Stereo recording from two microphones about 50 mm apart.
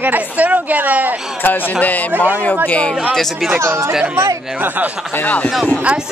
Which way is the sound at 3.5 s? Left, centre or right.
Right.